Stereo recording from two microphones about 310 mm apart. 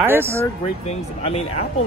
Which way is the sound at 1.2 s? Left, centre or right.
Centre.